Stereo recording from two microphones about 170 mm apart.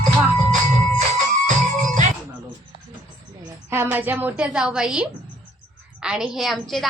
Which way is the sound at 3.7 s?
10° right (ahead or behind).